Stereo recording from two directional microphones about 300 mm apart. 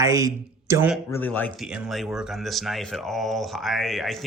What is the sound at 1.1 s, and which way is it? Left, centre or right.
Speech, centre.